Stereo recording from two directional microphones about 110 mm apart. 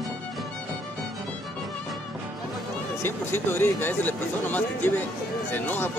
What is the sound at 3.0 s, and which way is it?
Speech, 20° left (ahead or behind).